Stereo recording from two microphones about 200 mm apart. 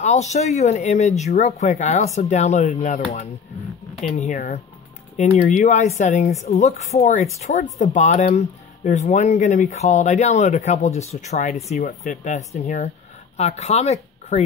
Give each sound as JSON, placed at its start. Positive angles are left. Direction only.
{"t": 0.0, "sound": "speech", "side_deg": 35}